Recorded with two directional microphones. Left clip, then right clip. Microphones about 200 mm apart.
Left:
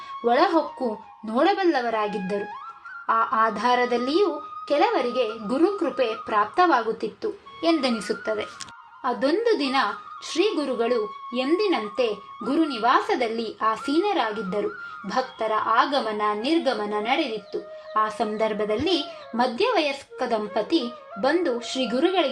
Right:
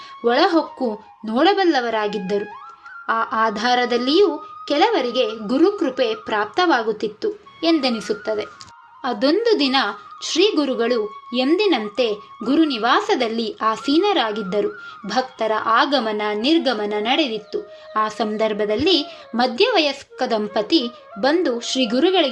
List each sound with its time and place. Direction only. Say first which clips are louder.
0.3 s a woman's voice: right 3 dB; 30° right (ahead or behind)